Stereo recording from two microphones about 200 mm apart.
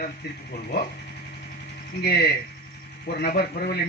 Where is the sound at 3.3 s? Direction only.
50° left (ahead or behind).